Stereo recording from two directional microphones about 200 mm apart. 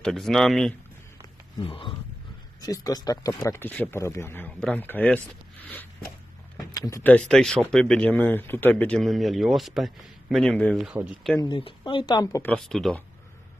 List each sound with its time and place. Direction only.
0.0 s speech: centre (ahead or behind)
1.6 s speech: 25° left (ahead or behind); by 11.3 s 5° right (ahead or behind)
11.3 s speech: 20° left (ahead or behind); by 13.0 s centre (ahead or behind)